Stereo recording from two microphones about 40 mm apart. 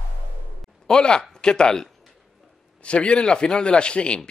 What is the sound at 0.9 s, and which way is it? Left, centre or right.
Speech, left.